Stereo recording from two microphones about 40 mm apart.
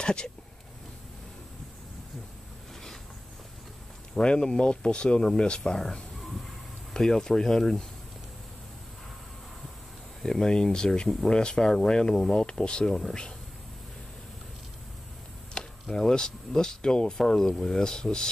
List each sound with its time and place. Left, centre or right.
0.0 s speech: left
4.2 s speech: left
10.2 s speech: centre
15.6 s a sound: left
16.0 s speech: centre